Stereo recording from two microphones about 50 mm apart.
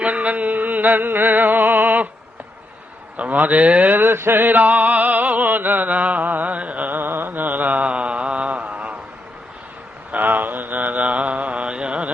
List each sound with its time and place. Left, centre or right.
0.0 s music: right
3.2 s a sound: right
10.1 s mantra: right